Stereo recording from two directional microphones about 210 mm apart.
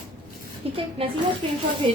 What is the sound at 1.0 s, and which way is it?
A woman's voice, 25° right (ahead or behind).